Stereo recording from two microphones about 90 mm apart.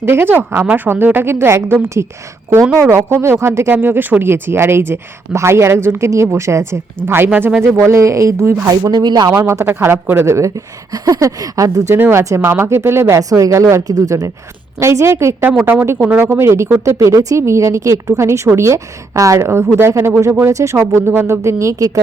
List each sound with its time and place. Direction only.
0.0 s a woman's voice: 25° right (ahead or behind); by 9.3 s 50° right (ahead or behind)
9.3 s a woman's voice: 35° right (ahead or behind)
11.9 s speech: 20° right (ahead or behind)
12.2 s a woman's voice: 35° right (ahead or behind)
14.8 s a woman's voice: 30° right (ahead or behind)